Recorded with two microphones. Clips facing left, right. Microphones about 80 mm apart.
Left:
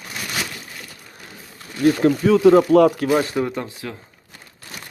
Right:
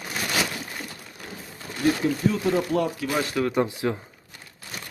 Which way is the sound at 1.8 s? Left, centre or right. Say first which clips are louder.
Left 7 dB; left.